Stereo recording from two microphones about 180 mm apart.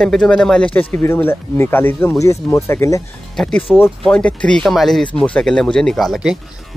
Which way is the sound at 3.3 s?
5° left (ahead or behind).